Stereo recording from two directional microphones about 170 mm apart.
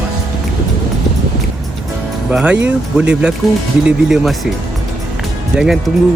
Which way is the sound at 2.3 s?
5° right (ahead or behind).